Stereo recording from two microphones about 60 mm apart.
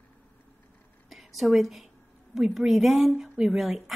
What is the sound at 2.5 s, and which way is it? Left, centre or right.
Speech, centre.